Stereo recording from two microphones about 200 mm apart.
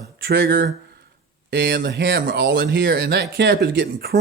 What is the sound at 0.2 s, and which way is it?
Speech, 55° right (ahead or behind).